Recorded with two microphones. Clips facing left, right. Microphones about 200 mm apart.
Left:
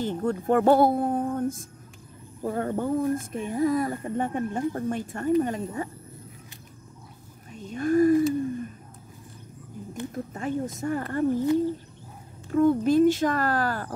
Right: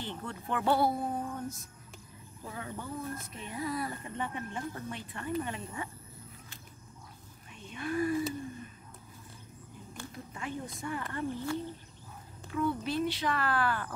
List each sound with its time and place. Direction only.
0.0 s speech: 45° left (ahead or behind)
7.5 s a sound: 40° left (ahead or behind)
10.1 s speech: 45° left (ahead or behind)
12.4 s speech: 45° left (ahead or behind)